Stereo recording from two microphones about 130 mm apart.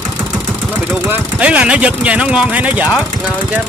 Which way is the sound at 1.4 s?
10° right (ahead or behind).